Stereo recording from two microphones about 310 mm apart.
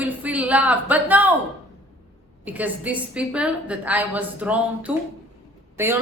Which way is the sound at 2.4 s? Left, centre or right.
Centre.